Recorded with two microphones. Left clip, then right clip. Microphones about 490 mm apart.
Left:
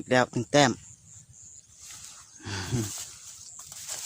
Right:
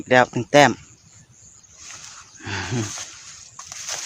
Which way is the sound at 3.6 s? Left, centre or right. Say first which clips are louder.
Right 10 dB; right.